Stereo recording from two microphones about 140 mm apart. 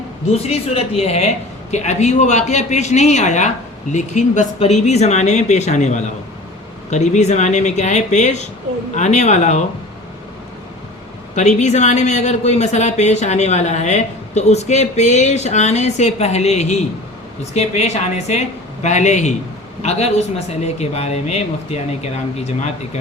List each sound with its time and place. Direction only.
0.4 s speech: 45° left (ahead or behind)
11.3 s speech: 55° left (ahead or behind)